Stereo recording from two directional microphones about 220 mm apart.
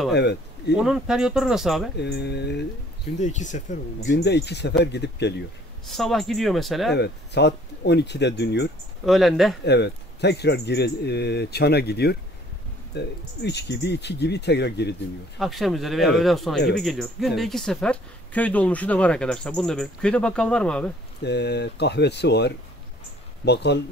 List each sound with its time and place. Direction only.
0.1 s speech: 50° left (ahead or behind)
0.7 s speech: centre (ahead or behind)
2.0 s speech: 50° left (ahead or behind)
3.2 s speech: 35° left (ahead or behind)
4.0 s speech: 55° left (ahead or behind)
5.9 s speech: centre (ahead or behind)
7.0 s speech: 50° left (ahead or behind)
9.0 s speech: centre (ahead or behind)
9.7 s speech: 50° left (ahead or behind)
15.3 s speech: centre (ahead or behind)
21.2 s speech: 50° left (ahead or behind)